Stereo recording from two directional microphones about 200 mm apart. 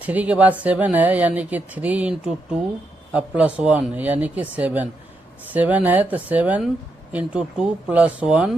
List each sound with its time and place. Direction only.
0.0 s speech: 5° right (ahead or behind)